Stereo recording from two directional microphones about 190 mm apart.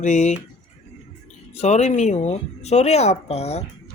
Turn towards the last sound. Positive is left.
turn(degrees=35)  # may be behind; listen again after turning